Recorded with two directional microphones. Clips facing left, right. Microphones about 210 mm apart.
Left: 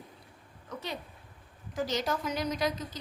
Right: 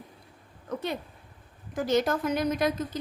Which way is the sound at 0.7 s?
55° right (ahead or behind).